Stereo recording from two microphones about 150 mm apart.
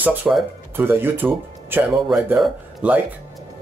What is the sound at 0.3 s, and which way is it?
A man's voice, 10° right (ahead or behind).